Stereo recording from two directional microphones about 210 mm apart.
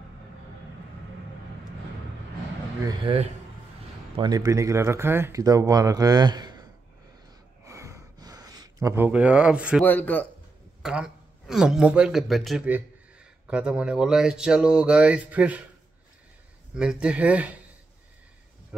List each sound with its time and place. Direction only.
2.8 s a man's voice: 25° right (ahead or behind)
7.6 s a sound: 15° right (ahead or behind)
9.8 s speech: 10° left (ahead or behind)
10.8 s speech: 5° right (ahead or behind)
16.7 s speech: 5° right (ahead or behind)